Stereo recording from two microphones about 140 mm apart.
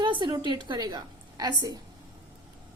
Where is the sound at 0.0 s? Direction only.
35° right (ahead or behind).